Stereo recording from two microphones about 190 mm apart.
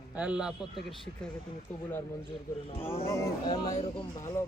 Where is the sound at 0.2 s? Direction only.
5° right (ahead or behind).